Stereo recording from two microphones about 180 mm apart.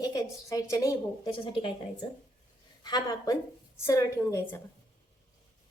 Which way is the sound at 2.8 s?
20° left (ahead or behind).